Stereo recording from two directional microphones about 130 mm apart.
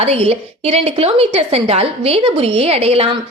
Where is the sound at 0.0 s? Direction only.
50° right (ahead or behind).